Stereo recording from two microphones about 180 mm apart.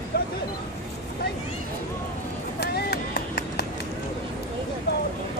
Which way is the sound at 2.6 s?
65° left (ahead or behind).